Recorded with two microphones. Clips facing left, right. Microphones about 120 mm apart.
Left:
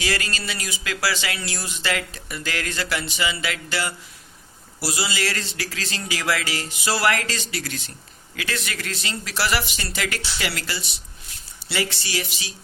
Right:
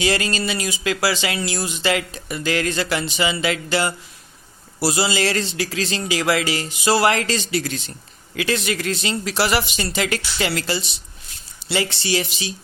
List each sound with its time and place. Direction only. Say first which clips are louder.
0.0 s speech: right 6 dB; 25° right (ahead or behind)